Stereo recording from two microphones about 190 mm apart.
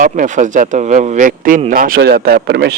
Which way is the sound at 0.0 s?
40° right (ahead or behind).